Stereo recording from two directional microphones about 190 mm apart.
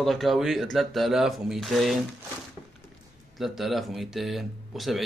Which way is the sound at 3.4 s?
Centre (ahead or behind).